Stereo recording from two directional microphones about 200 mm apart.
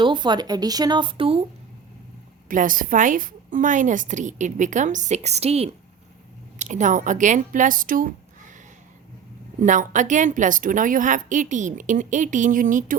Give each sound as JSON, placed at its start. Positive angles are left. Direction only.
{"t": 0.0, "sound": "speech", "side_deg": -25}
{"t": 2.5, "sound": "a woman's voice", "side_deg": -40}
{"t": 9.6, "sound": "a woman's voice", "side_deg": -40}